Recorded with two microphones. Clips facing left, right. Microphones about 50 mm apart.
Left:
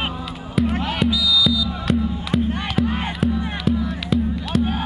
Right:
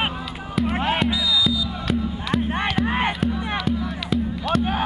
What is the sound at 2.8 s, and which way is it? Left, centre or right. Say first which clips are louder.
Music: right 2 dB; right.